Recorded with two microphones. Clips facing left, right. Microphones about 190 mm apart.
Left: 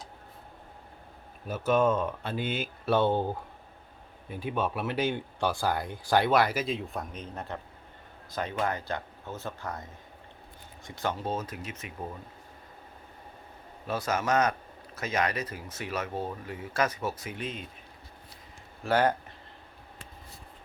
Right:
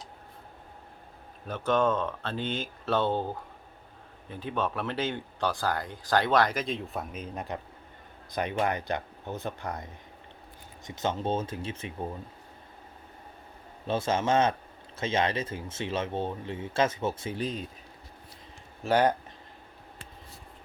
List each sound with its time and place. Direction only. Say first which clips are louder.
1.5 s speech: left 1 dB; 10° left (ahead or behind); by 9.7 s 15° right (ahead or behind)
10.8 s speech: right 2 dB; 20° right (ahead or behind)
13.8 s speech: right 2 dB; 25° right (ahead or behind)
18.8 s speech: right 1 dB; 15° right (ahead or behind)